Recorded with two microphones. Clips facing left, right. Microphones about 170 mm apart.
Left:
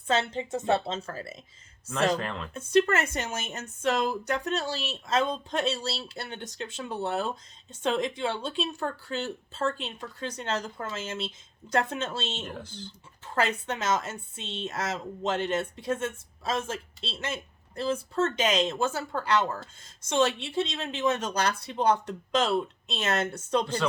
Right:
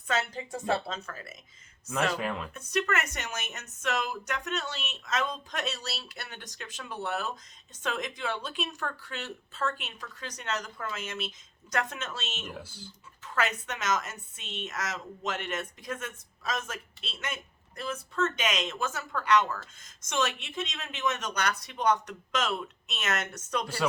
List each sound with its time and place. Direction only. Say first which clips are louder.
0.1 s a woman's voice: left 4 dB; 25° left (ahead or behind)
2.1 s speech: even; 5° right (ahead or behind)
2.5 s a woman's voice: left 12 dB; 30° left (ahead or behind)
12.6 s speech: left 6 dB; 10° right (ahead or behind)
13.2 s a woman's voice: left 3 dB; 30° left (ahead or behind)